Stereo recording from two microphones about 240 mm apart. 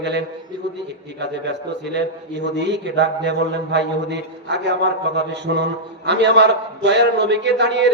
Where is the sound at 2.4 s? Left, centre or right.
Right.